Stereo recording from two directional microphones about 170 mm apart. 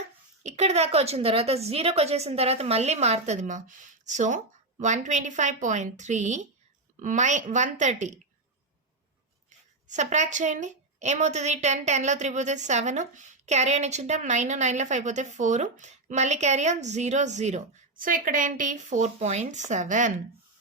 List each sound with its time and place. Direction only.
0.4 s a woman's voice: 40° right (ahead or behind)
9.5 s a woman's voice: 45° right (ahead or behind)